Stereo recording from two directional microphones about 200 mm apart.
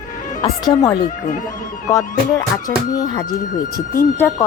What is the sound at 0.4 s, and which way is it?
Speech, 15° left (ahead or behind).